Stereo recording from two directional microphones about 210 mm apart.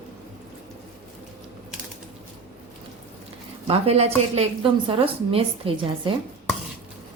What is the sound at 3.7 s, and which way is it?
A woman's voice, 30° right (ahead or behind).